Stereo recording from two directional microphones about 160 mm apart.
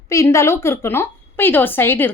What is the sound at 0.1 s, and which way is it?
A woman's voice, 20° left (ahead or behind).